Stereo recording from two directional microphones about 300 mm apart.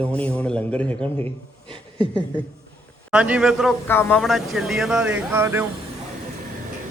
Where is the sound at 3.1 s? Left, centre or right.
Centre.